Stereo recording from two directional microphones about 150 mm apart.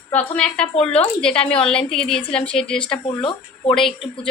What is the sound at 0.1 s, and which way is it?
A woman's voice, 10° left (ahead or behind).